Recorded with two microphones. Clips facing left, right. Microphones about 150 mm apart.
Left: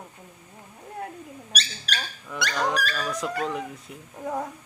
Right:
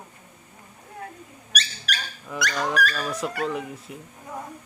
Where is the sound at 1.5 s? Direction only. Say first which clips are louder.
Right 2 dB; 35° left (ahead or behind).